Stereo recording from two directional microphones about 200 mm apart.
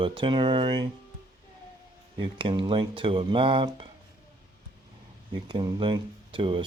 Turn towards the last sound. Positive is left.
turn(degrees=-25)  # may be behind; listen again after turning